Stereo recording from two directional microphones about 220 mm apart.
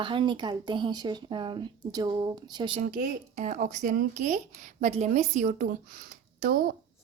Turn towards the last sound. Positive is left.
turn(degrees=-40)  # may be behind; listen again after turning